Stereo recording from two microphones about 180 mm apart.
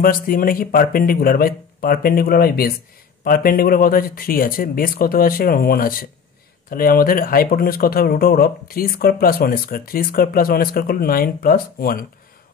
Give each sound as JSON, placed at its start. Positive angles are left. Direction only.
{"t": 0.0, "sound": "speech", "side_deg": 50}